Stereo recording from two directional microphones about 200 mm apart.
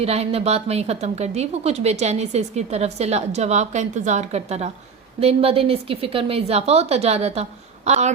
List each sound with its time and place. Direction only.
0.0 s a woman's voice: 30° right (ahead or behind)